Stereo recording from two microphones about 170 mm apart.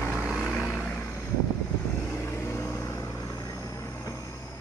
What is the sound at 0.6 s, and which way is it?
Vehicle, 10° left (ahead or behind).